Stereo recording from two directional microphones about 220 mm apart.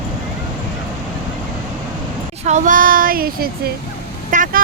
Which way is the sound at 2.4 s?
35° right (ahead or behind).